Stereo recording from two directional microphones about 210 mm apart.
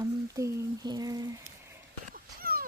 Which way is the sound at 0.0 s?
15° right (ahead or behind).